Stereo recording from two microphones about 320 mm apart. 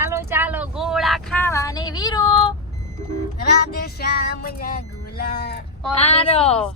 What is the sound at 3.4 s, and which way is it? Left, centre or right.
Child singing, left.